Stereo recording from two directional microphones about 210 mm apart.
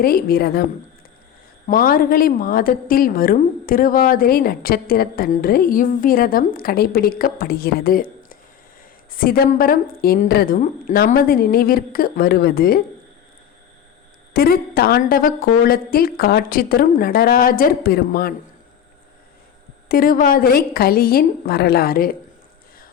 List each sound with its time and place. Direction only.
0.0 s a woman's voice: 45° left (ahead or behind)
1.6 s a woman's voice: 40° left (ahead or behind)
14.3 s a woman's voice: 45° left (ahead or behind)
19.9 s a woman's voice: 45° left (ahead or behind)